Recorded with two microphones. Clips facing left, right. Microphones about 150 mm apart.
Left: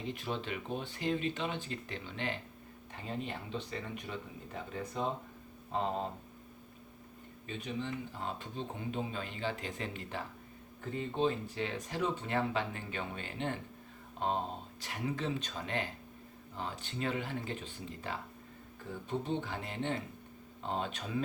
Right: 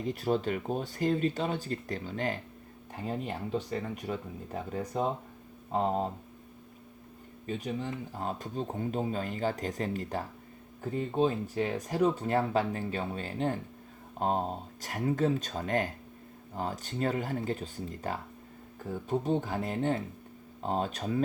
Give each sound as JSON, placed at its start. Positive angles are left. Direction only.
{"t": 0.0, "sound": "speech", "side_deg": -40}
{"t": 7.4, "sound": "speech", "side_deg": -40}